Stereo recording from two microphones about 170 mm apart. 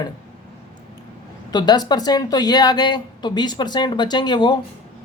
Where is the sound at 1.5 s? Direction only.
25° left (ahead or behind).